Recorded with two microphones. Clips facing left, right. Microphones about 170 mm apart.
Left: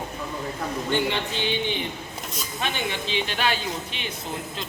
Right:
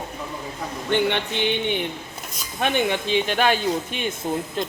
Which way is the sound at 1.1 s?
60° right (ahead or behind).